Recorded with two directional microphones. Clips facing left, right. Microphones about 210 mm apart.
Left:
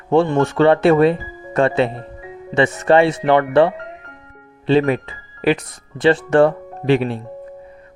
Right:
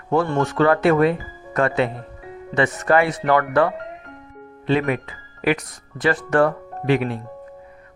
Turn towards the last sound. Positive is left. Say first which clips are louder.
# left 3 dB
turn(degrees=30)  # may be behind; listen again after turning